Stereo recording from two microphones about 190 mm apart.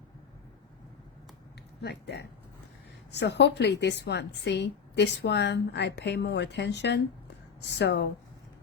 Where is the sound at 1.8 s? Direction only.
60° left (ahead or behind).